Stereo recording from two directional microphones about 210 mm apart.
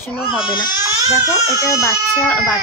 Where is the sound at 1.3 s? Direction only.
15° left (ahead or behind).